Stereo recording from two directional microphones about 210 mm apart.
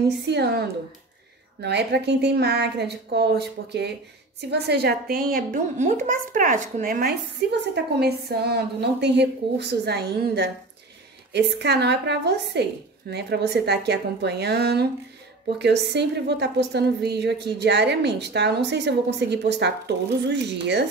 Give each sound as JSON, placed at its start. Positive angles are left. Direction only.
{"t": 0.3, "sound": "a child's voice", "side_deg": -50}